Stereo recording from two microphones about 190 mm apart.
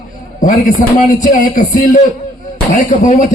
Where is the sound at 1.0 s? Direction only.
45° left (ahead or behind).